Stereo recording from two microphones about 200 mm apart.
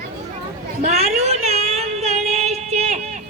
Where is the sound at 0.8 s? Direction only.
35° right (ahead or behind).